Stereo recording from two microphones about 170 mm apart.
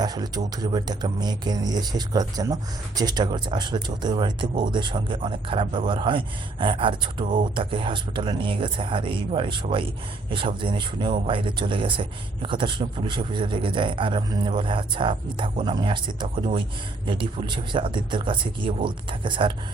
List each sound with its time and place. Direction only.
0.0 s speech: 25° right (ahead or behind)